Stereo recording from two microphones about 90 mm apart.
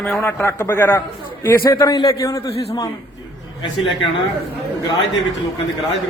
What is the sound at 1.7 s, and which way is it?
Speech, 45° left (ahead or behind).